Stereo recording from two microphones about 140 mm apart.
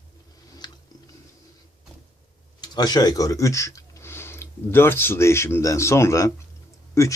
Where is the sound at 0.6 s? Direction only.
30° left (ahead or behind).